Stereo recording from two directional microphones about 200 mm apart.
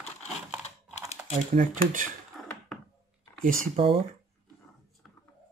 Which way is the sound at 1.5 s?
40° right (ahead or behind).